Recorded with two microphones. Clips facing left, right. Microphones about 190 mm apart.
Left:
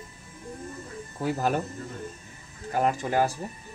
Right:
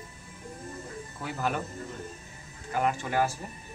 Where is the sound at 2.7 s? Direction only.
35° left (ahead or behind).